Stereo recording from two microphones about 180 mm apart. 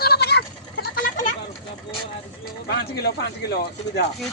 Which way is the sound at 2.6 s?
65° left (ahead or behind).